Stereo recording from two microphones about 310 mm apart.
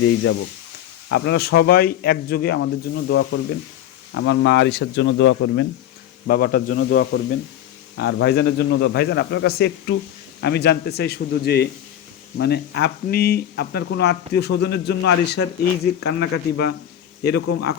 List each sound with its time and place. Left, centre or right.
0.0 s speech: left
6.2 s speech: left